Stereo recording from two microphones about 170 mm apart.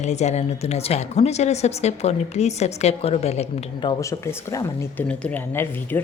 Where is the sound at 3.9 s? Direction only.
15° left (ahead or behind).